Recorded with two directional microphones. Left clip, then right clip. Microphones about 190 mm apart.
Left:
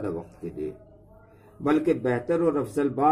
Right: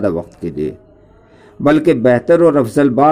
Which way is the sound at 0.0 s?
45° right (ahead or behind).